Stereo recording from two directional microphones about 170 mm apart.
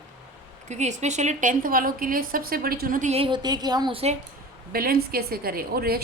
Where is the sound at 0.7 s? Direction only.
45° right (ahead or behind).